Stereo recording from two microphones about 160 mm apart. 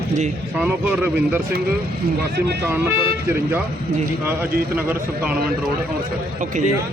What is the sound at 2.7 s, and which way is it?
Speech, 15° right (ahead or behind).